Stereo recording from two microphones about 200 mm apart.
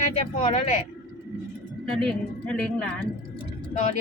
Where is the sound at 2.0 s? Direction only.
5° left (ahead or behind).